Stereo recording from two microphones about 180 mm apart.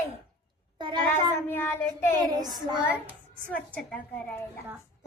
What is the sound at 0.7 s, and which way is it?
Speech, 25° right (ahead or behind).